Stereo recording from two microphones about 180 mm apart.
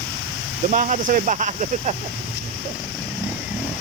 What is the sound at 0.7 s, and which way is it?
Speech, 40° right (ahead or behind).